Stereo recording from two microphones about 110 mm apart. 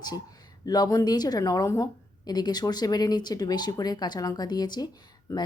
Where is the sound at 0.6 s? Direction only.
35° left (ahead or behind).